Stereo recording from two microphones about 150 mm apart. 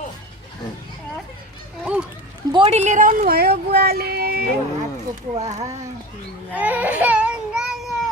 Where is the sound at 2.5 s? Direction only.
40° right (ahead or behind); by 4.4 s 90° right.